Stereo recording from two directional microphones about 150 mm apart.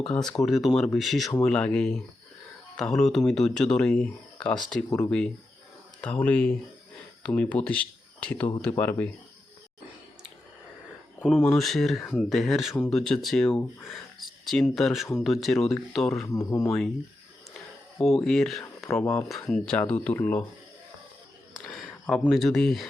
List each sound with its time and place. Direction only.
0.0 s speech: 5° left (ahead or behind)
11.2 s speech: centre (ahead or behind)
14.5 s speech: 5° left (ahead or behind)
16.2 s speech: 25° left (ahead or behind)
16.6 s speech: 5° left (ahead or behind)
18.0 s speech: centre (ahead or behind)
18.9 s speech: 15° left (ahead or behind)
19.3 s speech: 5° left (ahead or behind)
21.5 s a sound: centre (ahead or behind)
22.3 s speech: centre (ahead or behind)